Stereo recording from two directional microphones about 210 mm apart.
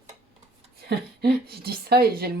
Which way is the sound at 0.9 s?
50° right (ahead or behind).